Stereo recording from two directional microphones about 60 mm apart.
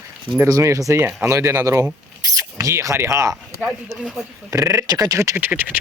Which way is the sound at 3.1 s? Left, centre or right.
Right.